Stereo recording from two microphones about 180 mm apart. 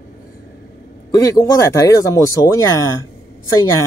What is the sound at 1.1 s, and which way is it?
Speech, 15° left (ahead or behind).